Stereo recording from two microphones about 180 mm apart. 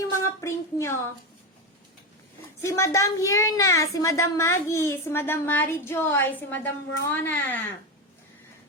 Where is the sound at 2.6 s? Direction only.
15° left (ahead or behind).